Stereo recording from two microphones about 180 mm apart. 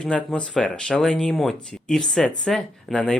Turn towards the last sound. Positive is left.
turn(degrees=5)  # may be behind; listen again after turning